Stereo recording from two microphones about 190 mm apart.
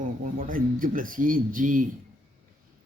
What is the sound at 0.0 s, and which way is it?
Speech, 45° right (ahead or behind).